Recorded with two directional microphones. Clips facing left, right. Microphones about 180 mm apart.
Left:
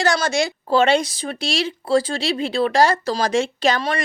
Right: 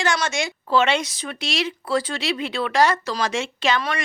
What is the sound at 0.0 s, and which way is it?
Speech, 35° left (ahead or behind).